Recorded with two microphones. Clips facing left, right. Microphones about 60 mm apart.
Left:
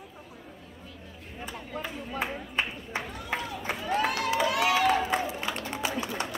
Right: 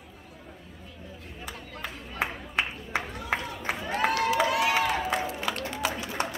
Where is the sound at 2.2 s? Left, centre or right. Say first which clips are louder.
Right 2 dB; right.